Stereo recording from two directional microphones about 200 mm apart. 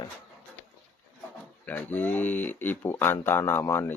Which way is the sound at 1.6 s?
10° left (ahead or behind).